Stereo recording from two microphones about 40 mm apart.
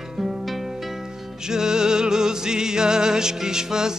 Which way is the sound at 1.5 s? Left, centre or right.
Centre.